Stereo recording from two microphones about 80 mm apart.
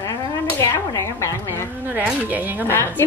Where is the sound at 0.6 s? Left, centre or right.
Left.